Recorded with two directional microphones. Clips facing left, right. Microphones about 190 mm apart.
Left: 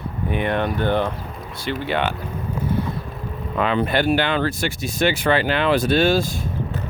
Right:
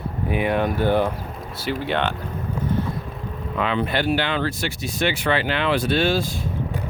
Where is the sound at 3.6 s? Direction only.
45° left (ahead or behind).